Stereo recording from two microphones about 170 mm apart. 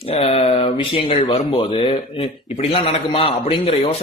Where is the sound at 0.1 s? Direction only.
35° left (ahead or behind).